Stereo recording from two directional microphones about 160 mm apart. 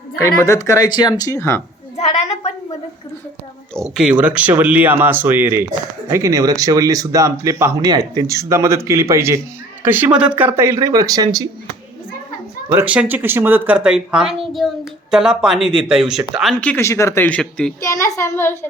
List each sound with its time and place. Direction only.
0.4 s speech: 20° left (ahead or behind)
2.0 s a sound: 40° left (ahead or behind)
3.9 s speech: 5° right (ahead or behind); by 11.4 s 25° right (ahead or behind)
12.6 s speech: 10° right (ahead or behind); by 16.8 s 5° left (ahead or behind)
16.8 s speech: 20° left (ahead or behind)
17.7 s speech: 20° left (ahead or behind)